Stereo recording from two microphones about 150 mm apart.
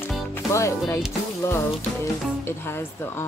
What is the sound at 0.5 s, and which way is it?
Speech, 20° left (ahead or behind).